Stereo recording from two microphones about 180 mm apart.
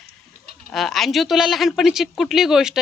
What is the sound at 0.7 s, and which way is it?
Speech, centre (ahead or behind).